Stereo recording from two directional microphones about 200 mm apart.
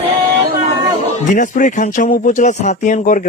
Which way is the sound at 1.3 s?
40° left (ahead or behind).